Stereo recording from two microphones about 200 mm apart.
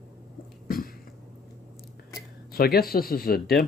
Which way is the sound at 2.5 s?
50° left (ahead or behind).